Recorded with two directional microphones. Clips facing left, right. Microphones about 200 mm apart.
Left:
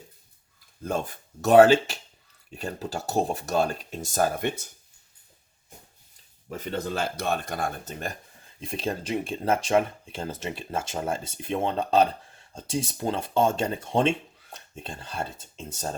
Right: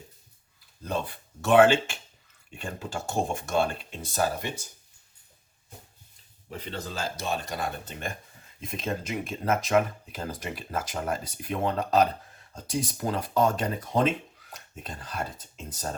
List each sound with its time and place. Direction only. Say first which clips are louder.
0.8 s speech: left 2 dB; 45° left (ahead or behind)
6.5 s speech: left 6 dB; 45° left (ahead or behind); by 16.0 s 25° left (ahead or behind)